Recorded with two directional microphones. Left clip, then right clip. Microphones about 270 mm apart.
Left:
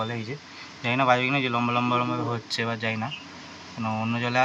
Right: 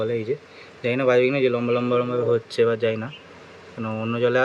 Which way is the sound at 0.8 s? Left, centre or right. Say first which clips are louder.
Right 3 dB; centre.